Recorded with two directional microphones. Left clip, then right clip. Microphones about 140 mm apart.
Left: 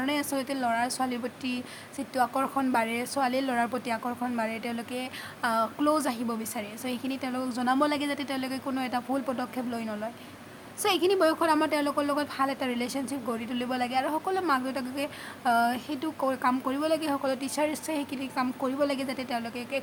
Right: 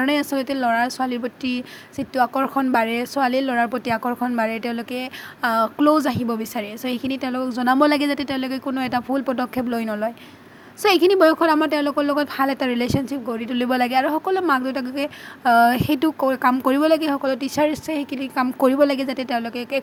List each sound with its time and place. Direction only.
0.0 s a woman's voice: 45° right (ahead or behind)
13.2 s a woman's voice: 30° right (ahead or behind); by 16.1 s 65° right (ahead or behind)
16.1 s speech: 45° right (ahead or behind)
18.6 s a woman's voice: 55° right (ahead or behind)